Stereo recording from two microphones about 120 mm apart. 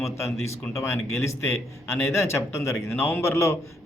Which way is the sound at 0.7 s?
20° left (ahead or behind).